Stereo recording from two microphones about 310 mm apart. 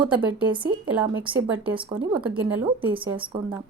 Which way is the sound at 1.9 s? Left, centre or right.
Centre.